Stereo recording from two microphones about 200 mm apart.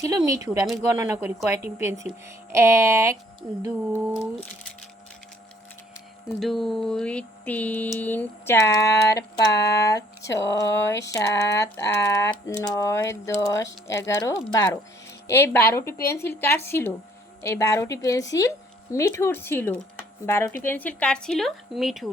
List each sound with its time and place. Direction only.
0.0 s speech: 15° right (ahead or behind)
6.4 s a woman's voice: centre (ahead or behind)